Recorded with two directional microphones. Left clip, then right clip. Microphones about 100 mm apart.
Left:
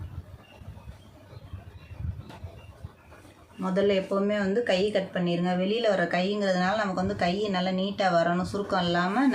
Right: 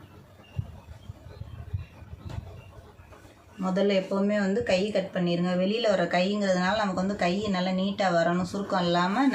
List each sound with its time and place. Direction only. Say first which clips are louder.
3.6 s speech: even; 35° left (ahead or behind)